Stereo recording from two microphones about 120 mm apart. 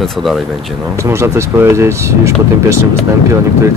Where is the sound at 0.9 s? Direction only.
25° right (ahead or behind).